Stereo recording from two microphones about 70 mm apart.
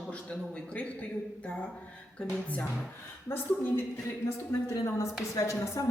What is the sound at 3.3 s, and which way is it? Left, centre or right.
Speech, left.